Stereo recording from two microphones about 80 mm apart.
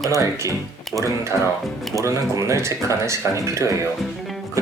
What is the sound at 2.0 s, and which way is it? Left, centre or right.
Speech, right.